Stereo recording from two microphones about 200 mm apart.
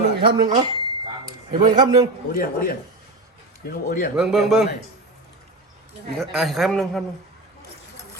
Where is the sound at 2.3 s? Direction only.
50° left (ahead or behind).